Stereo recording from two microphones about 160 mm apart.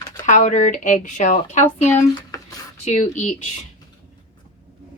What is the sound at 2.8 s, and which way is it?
Speech, 45° left (ahead or behind).